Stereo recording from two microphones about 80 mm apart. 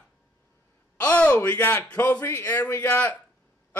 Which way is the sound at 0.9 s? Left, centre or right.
Centre.